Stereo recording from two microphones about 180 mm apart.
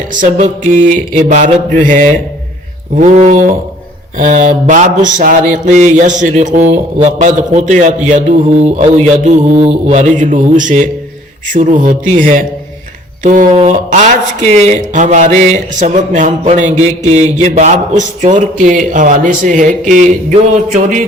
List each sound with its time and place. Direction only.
0.1 s mantra: 45° right (ahead or behind)
3.0 s speech: 40° right (ahead or behind)
4.2 s mantra: 45° right (ahead or behind)
9.2 s speech: 40° right (ahead or behind)
9.9 s mantra: 40° right (ahead or behind)
13.5 s speech: 35° right (ahead or behind)
17.6 s mantra: 45° right (ahead or behind)